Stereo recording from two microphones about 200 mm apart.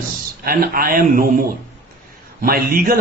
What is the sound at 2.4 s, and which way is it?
Speech, 45° right (ahead or behind).